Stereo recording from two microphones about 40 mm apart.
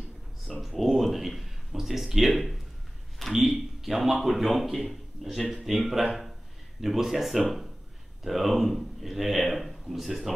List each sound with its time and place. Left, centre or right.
0.6 s a man's voice: centre